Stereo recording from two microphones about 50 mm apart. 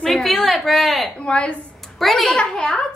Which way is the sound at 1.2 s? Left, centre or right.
Left.